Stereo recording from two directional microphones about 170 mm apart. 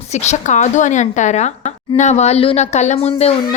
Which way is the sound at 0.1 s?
40° left (ahead or behind).